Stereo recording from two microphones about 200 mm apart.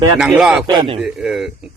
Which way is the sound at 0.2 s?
5° right (ahead or behind).